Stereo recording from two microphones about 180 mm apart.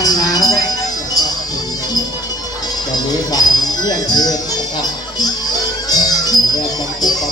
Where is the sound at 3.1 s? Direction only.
20° left (ahead or behind).